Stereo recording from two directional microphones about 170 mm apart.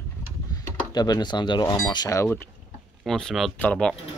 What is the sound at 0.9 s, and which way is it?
Speech, 25° left (ahead or behind).